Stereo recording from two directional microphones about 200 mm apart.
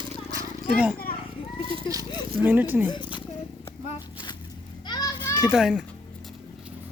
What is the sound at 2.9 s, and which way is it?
Speech, 25° left (ahead or behind).